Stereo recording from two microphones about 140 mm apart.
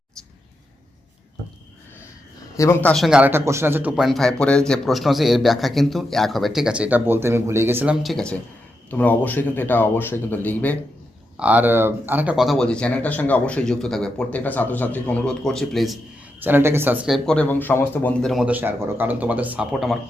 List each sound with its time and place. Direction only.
2.6 s speech: 15° left (ahead or behind)
2.9 s speech: 5° right (ahead or behind)
3.9 s speech: centre (ahead or behind)
8.0 s speech: 5° left (ahead or behind)
11.3 s speech: 10° right (ahead or behind)
16.4 s speech: 15° right (ahead or behind)
17.2 s speech: 10° left (ahead or behind)
18.2 s speech: centre (ahead or behind)